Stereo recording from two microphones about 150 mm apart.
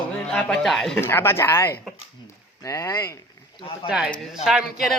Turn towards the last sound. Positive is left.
turn(degrees=0)  # may be behind; listen again after turning